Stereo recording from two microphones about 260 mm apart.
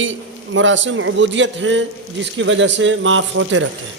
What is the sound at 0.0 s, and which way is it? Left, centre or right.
A man's voice, right.